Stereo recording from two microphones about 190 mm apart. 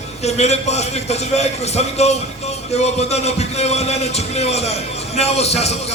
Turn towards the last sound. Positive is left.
turn(degrees=35)  # may be behind; listen again after turning